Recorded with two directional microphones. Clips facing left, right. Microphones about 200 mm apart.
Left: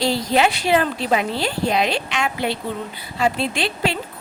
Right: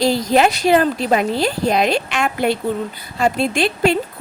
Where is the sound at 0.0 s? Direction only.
45° right (ahead or behind).